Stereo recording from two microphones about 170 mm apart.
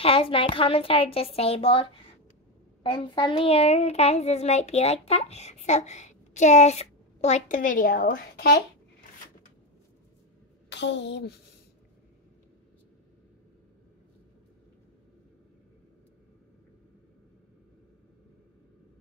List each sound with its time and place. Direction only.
0.0 s a child's voice: 35° left (ahead or behind)
2.9 s a child's voice: 30° left (ahead or behind); by 8.6 s 65° left (ahead or behind)
10.7 s a woman's voice: 90° left